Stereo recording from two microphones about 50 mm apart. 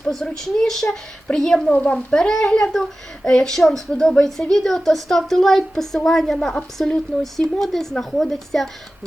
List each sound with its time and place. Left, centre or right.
0.0 s a woman's voice: centre
1.8 s a woman's voice: left; by 8.7 s centre